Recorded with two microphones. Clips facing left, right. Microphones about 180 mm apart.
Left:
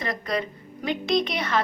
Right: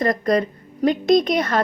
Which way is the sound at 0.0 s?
45° right (ahead or behind).